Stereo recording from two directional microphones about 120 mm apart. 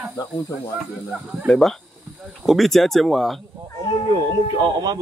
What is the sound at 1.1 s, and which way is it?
Speech, 5° right (ahead or behind).